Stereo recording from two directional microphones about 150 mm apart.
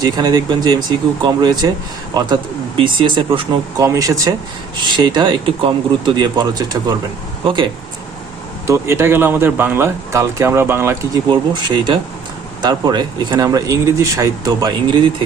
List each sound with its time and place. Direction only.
0.0 s speech: 25° right (ahead or behind)
3.8 s speech: 25° right (ahead or behind)
8.6 s speech: 20° right (ahead or behind)
11.3 s speech: 30° right (ahead or behind)